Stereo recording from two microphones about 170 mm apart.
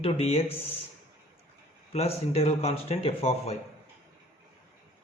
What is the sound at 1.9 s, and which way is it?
Speech, 35° left (ahead or behind).